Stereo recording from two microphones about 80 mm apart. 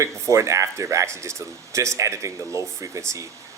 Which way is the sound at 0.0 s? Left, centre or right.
Right.